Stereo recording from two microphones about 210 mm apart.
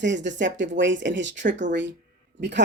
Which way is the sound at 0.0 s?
60° right (ahead or behind).